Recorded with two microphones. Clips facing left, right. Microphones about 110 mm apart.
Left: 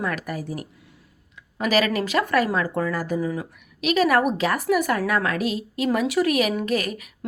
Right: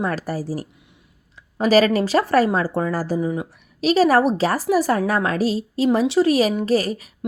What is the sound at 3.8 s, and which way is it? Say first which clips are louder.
Speech: right 4 dB; 35° right (ahead or behind).